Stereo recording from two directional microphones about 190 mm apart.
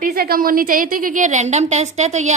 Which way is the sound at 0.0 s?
50° right (ahead or behind).